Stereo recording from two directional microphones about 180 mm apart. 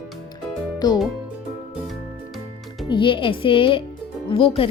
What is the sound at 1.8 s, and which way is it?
Music, centre (ahead or behind).